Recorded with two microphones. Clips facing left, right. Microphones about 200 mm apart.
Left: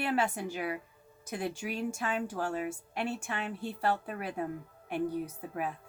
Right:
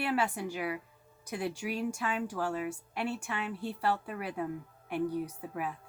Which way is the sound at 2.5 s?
30° left (ahead or behind).